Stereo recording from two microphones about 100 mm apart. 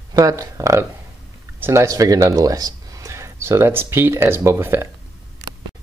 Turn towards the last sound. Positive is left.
turn(degrees=-25)  # may be behind; listen again after turning